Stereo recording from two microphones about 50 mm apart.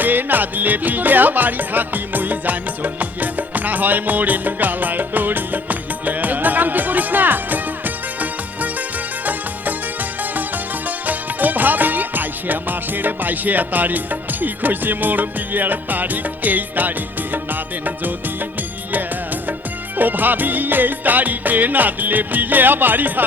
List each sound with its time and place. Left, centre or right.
0.0 s music: right
10.8 s music: right
20.0 s music: right